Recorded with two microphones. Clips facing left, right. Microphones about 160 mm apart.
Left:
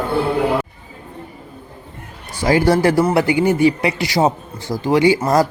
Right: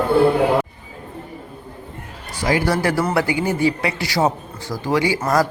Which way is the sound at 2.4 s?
25° left (ahead or behind).